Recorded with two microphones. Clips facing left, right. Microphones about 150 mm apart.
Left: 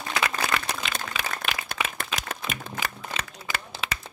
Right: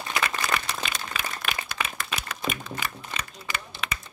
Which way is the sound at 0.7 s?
75° left (ahead or behind).